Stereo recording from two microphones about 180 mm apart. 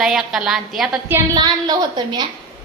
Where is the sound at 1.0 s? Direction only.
15° right (ahead or behind).